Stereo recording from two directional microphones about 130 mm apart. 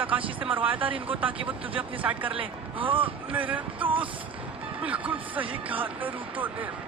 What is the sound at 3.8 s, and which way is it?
Speech, 40° right (ahead or behind).